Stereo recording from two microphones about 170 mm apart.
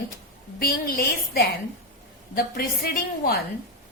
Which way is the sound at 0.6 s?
65° left (ahead or behind).